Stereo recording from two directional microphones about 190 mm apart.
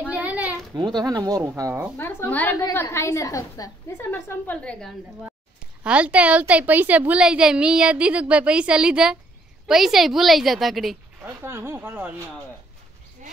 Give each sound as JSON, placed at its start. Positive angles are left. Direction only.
{"t": 0.1, "sound": "a sound", "side_deg": -10}
{"t": 0.7, "sound": "speech", "side_deg": -20}
{"t": 2.0, "sound": "a woman's voice", "side_deg": 10}
{"t": 5.9, "sound": "a woman's voice", "side_deg": -5}
{"t": 11.2, "sound": "speech", "side_deg": -10}
{"t": 13.2, "sound": "a sound", "side_deg": -40}